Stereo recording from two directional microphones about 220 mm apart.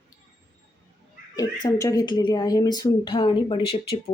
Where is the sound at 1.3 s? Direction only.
15° left (ahead or behind).